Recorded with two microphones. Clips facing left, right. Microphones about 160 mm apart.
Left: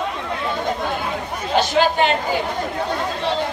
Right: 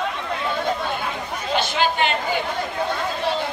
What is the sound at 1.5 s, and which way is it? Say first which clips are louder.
Speech: left 5 dB; 40° left (ahead or behind).